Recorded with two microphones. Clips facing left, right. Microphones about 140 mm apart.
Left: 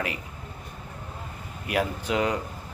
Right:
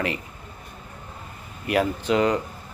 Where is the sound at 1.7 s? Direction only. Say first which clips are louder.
Right 5 dB; 5° left (ahead or behind).